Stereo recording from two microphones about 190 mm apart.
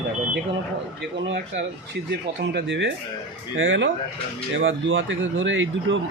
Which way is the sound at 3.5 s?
85° right.